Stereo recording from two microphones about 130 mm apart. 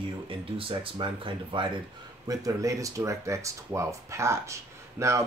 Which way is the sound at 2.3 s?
25° right (ahead or behind).